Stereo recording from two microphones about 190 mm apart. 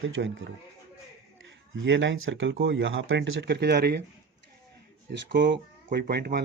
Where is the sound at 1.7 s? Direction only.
75° right (ahead or behind).